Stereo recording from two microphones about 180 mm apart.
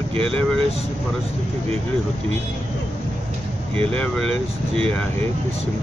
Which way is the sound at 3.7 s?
30° right (ahead or behind).